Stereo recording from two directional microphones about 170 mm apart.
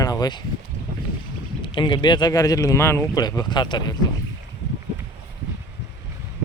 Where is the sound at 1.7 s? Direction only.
30° left (ahead or behind).